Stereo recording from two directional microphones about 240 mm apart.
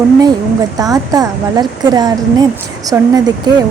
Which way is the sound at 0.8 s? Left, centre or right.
Centre.